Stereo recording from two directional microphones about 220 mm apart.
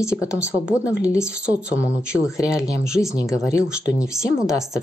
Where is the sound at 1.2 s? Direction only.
5° right (ahead or behind).